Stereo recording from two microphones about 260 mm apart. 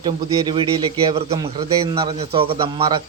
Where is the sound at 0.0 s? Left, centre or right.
Centre.